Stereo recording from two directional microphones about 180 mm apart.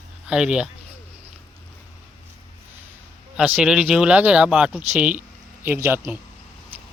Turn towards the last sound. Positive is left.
turn(degrees=-10)  # may be behind; listen again after turning